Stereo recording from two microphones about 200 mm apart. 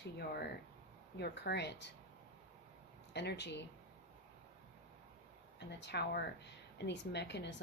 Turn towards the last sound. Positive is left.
turn(degrees=60)  # may be behind; listen again after turning